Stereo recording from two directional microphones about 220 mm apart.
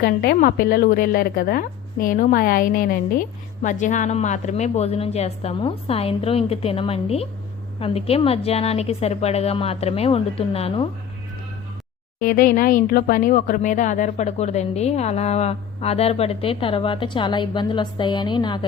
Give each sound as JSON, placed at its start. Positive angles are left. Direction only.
{"t": 0.0, "sound": "a woman's voice", "side_deg": 45}
{"t": 12.2, "sound": "speech", "side_deg": 40}